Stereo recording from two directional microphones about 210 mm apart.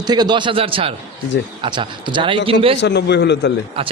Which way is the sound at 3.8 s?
25° right (ahead or behind).